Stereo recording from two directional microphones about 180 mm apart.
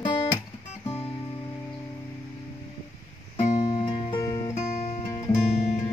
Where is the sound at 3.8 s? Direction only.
25° left (ahead or behind).